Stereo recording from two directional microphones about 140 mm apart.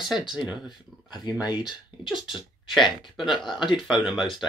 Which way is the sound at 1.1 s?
30° left (ahead or behind).